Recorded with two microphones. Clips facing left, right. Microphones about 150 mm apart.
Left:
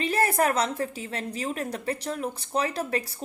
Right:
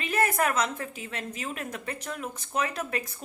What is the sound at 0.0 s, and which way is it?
A woman's voice, 35° left (ahead or behind).